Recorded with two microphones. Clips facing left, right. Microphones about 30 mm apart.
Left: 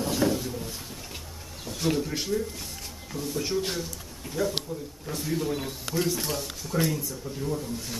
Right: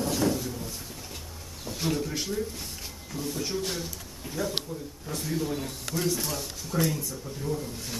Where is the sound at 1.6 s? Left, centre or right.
Centre.